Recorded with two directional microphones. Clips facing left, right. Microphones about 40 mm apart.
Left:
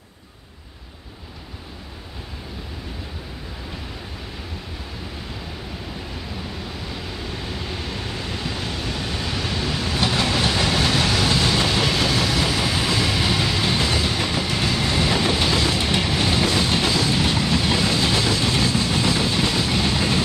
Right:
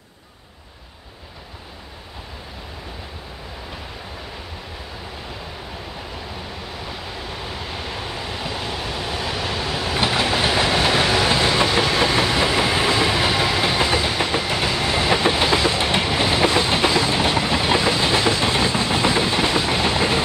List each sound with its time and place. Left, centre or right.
7.9 s waves: centre
11.6 s train: right